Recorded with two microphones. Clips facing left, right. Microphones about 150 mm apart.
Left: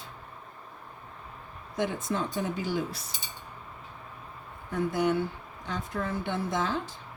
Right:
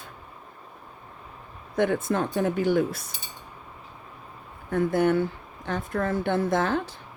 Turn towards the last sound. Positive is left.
turn(degrees=-55)  # may be behind; listen again after turning